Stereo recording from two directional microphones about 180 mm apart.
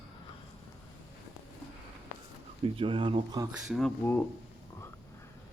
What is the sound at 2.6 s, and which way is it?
Speech, 30° right (ahead or behind).